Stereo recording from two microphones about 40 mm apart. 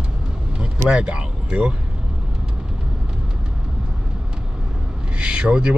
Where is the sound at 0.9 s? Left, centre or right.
Right.